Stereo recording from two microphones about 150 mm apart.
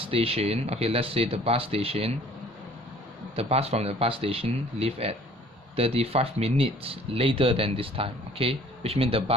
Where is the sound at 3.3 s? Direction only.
40° right (ahead or behind).